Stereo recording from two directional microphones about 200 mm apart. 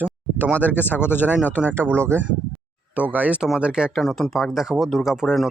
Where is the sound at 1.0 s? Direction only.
10° left (ahead or behind).